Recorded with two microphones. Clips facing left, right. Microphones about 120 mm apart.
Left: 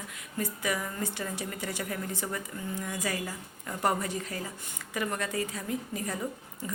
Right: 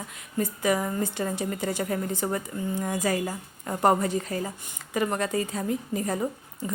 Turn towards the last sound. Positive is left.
turn(degrees=-40)  # may be behind; listen again after turning